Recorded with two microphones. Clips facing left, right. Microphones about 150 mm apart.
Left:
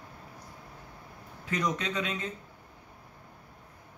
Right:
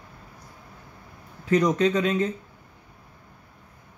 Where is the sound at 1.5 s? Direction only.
45° right (ahead or behind).